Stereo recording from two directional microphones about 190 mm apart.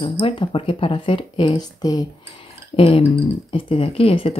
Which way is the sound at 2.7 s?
30° left (ahead or behind).